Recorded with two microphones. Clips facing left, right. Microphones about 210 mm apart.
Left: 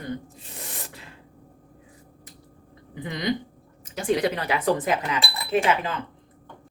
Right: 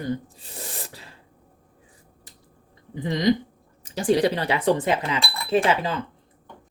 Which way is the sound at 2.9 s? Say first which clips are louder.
Right 6 dB; 35° right (ahead or behind).